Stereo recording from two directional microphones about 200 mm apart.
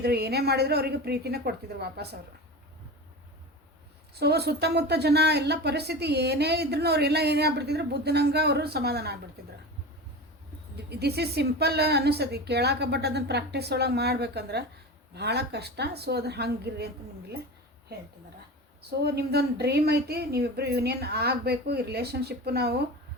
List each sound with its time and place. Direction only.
0.0 s speech: 55° right (ahead or behind)
4.2 s speech: 55° right (ahead or behind)
10.8 s speech: 55° right (ahead or behind)
18.8 s speech: 55° right (ahead or behind)